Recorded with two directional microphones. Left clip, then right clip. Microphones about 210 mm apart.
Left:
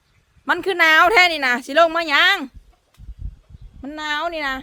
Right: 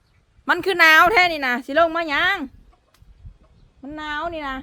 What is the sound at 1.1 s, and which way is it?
Speech, 15° left (ahead or behind).